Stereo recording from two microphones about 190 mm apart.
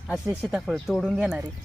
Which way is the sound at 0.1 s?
5° right (ahead or behind).